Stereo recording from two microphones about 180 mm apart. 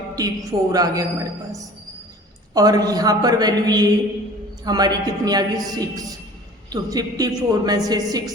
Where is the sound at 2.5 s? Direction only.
20° right (ahead or behind).